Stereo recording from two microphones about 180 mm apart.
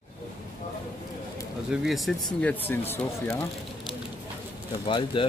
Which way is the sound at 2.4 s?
10° left (ahead or behind).